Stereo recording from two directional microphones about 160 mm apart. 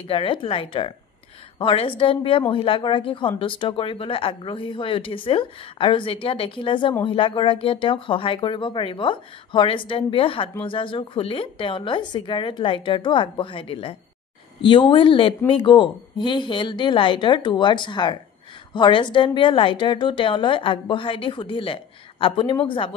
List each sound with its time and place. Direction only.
0.1 s speech: 35° left (ahead or behind)